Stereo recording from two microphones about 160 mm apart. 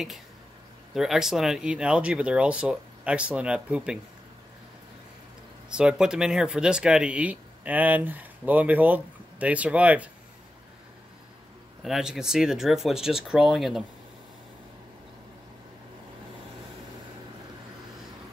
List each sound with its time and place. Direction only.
0.9 s speech: centre (ahead or behind)
5.7 s speech: 5° right (ahead or behind)
11.8 s speech: 5° right (ahead or behind)